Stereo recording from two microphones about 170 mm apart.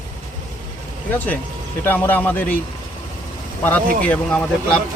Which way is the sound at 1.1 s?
10° left (ahead or behind).